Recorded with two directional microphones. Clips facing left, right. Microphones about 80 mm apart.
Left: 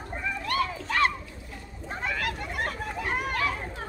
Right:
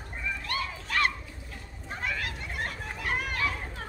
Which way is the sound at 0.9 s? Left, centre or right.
Left.